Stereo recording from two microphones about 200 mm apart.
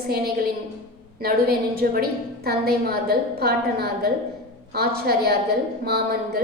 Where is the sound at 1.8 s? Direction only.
50° right (ahead or behind).